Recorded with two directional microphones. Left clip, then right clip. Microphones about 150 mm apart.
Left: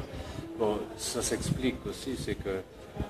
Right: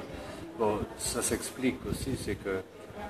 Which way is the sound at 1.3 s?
20° left (ahead or behind).